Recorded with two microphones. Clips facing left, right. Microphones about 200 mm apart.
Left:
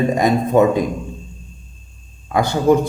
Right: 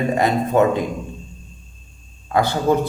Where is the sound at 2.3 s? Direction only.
15° left (ahead or behind).